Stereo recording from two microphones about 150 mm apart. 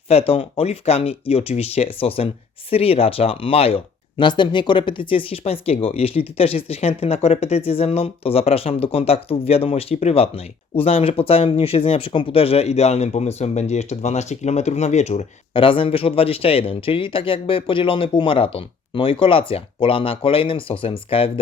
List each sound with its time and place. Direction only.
0.1 s speech: 40° left (ahead or behind)
15.5 s speech: 35° left (ahead or behind)